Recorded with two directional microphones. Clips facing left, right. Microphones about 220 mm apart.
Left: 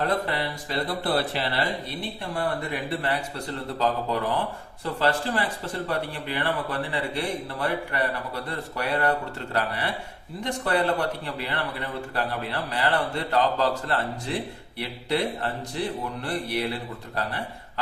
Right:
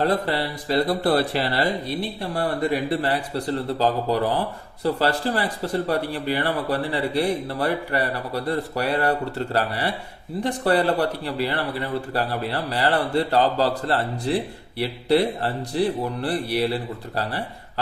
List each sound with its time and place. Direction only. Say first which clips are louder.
0.0 s speech: right 4 dB; 35° right (ahead or behind)